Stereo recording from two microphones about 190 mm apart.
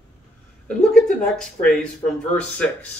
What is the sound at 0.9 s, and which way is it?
A man's voice, centre (ahead or behind).